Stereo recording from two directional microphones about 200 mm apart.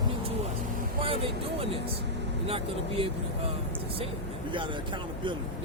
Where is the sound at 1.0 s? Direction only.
30° right (ahead or behind).